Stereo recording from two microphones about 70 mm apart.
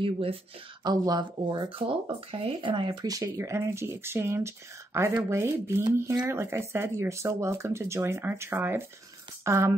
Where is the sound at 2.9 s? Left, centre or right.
Right.